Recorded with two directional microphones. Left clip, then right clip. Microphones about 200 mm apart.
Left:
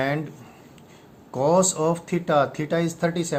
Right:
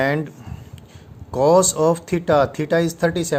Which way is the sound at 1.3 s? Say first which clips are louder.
Right 5 dB; 45° right (ahead or behind).